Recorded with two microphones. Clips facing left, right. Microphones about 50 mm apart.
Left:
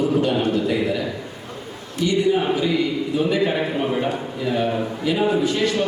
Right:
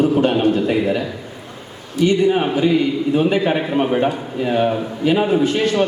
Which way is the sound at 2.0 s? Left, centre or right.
Right.